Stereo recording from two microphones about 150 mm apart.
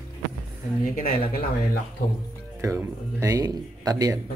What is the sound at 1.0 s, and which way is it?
Speech, 70° left (ahead or behind).